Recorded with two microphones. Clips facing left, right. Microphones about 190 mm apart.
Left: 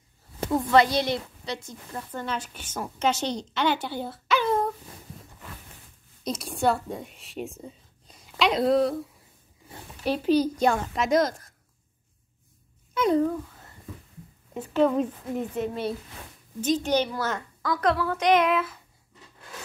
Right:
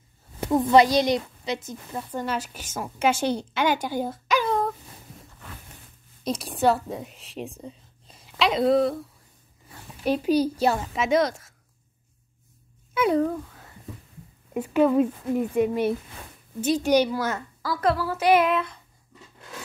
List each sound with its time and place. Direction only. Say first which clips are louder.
0.5 s a woman's voice: right 3 dB; 20° right (ahead or behind)
2.0 s a woman's voice: right 3 dB; 5° right (ahead or behind)
6.2 s a woman's voice: right 3 dB; 30° right (ahead or behind)
6.6 s a woman's voice: right 3 dB; centre (ahead or behind)
10.2 s a woman's voice: left 1 dB; 10° right (ahead or behind)
12.9 s speech: right 1 dB; 10° right (ahead or behind)
14.5 s a woman's voice: right 2 dB; 10° right (ahead or behind)